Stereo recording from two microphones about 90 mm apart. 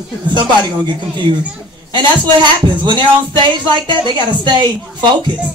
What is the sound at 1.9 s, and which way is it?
Speech, 55° right (ahead or behind).